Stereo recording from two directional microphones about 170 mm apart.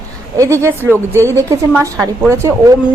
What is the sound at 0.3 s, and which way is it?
A woman's voice, 15° right (ahead or behind).